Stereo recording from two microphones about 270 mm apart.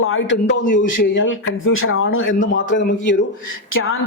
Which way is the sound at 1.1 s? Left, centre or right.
Left.